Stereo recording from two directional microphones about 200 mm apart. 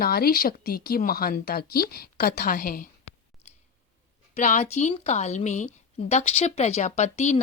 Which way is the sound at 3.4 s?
35° left (ahead or behind).